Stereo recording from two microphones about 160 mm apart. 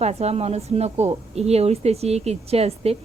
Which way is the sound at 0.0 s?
40° right (ahead or behind).